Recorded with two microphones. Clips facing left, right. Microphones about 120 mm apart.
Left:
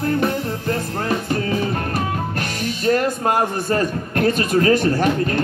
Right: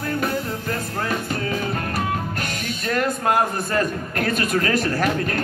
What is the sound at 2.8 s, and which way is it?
A man's voice, 40° left (ahead or behind).